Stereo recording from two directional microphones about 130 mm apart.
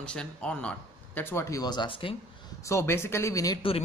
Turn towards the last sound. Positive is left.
turn(degrees=25)  # may be behind; listen again after turning